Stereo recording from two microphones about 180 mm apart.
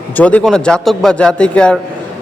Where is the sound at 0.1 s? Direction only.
10° left (ahead or behind).